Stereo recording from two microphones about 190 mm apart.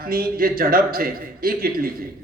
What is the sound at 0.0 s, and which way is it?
A man's voice, 50° right (ahead or behind).